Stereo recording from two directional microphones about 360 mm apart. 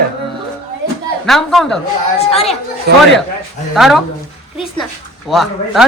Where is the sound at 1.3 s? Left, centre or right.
Centre.